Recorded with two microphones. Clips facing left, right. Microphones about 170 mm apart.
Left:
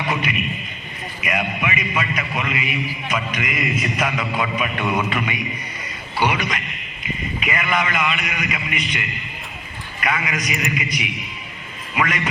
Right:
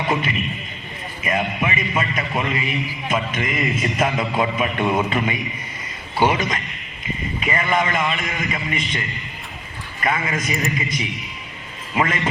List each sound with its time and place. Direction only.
0.1 s a man's voice: 30° right (ahead or behind)